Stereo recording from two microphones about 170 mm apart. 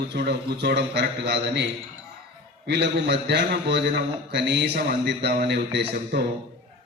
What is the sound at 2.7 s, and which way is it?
A man's voice, 85° right.